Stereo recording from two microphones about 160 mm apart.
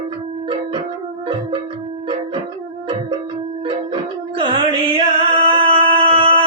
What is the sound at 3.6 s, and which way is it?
Music, 30° right (ahead or behind).